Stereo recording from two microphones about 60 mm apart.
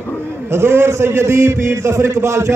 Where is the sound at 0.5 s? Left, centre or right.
Right.